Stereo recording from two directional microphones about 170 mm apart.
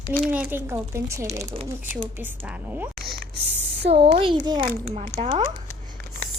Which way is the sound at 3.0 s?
65° right (ahead or behind).